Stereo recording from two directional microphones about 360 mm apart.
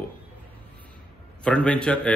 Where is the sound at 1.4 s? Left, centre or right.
Centre.